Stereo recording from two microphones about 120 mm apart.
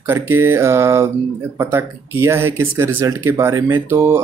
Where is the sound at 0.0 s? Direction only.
20° right (ahead or behind).